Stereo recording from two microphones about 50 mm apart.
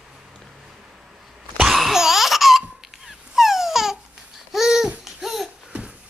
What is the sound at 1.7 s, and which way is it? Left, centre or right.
Laughter, centre.